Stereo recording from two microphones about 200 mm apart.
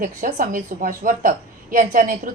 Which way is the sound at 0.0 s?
45° right (ahead or behind).